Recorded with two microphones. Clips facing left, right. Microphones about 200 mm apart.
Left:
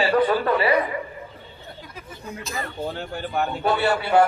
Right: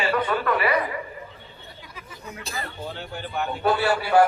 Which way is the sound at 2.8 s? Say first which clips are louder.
Left 4 dB; 50° left (ahead or behind).